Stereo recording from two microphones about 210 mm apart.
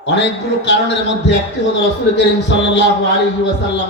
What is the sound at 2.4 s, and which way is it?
Speech, 55° left (ahead or behind).